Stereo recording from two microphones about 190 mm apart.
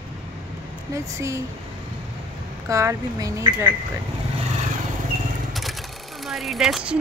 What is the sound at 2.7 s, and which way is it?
Speech, 15° right (ahead or behind).